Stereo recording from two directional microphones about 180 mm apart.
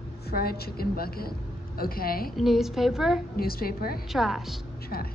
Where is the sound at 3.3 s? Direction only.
55° left (ahead or behind).